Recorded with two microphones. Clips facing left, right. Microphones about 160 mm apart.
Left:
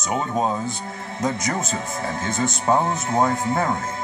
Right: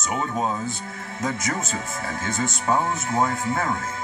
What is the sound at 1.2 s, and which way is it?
Speech, 40° left (ahead or behind).